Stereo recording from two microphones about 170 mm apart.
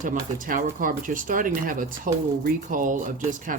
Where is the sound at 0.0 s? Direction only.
50° right (ahead or behind).